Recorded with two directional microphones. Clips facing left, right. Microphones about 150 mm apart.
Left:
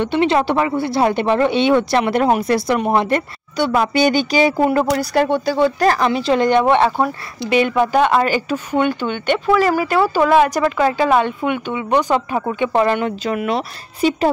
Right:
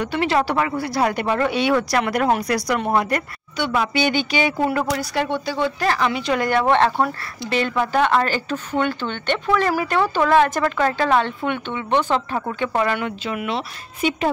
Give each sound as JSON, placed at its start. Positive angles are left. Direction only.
{"t": 0.0, "sound": "speech", "side_deg": 25}
{"t": 3.5, "sound": "a woman's voice", "side_deg": 40}
{"t": 12.7, "sound": "a woman's voice", "side_deg": 30}